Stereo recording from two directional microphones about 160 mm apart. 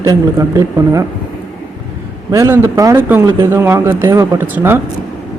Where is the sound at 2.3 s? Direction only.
20° right (ahead or behind).